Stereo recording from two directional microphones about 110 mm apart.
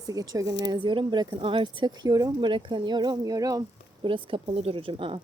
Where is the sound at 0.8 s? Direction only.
45° right (ahead or behind).